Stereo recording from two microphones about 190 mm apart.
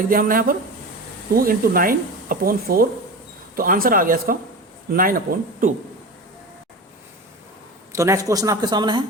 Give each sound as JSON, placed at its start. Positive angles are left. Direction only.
{"t": 0.1, "sound": "speech", "side_deg": -45}
{"t": 7.9, "sound": "speech", "side_deg": -15}